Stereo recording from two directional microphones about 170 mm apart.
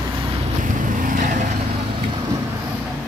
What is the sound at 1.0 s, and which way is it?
Vehicle, 55° right (ahead or behind).